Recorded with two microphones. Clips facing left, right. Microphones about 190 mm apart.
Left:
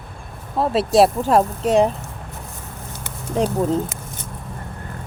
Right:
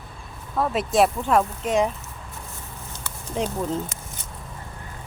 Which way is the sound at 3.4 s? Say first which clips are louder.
Left 6 dB; 40° left (ahead or behind).